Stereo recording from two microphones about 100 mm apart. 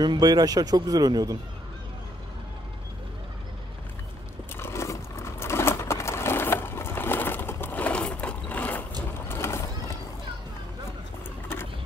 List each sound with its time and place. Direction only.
0.0 s speech: 45° right (ahead or behind)
4.6 s sewing machine: 25° left (ahead or behind)
9.3 s horse: 25° left (ahead or behind)